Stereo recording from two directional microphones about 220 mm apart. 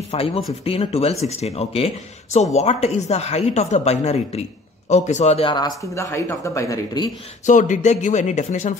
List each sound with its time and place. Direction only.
0.1 s speech: 25° left (ahead or behind)
7.4 s speech: 35° left (ahead or behind)